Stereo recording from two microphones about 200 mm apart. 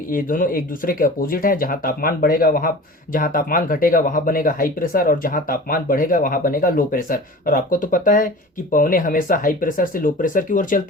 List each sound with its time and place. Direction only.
0.1 s speech: 45° left (ahead or behind)